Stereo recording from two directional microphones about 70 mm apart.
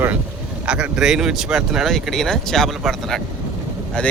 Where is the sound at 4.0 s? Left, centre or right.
Centre.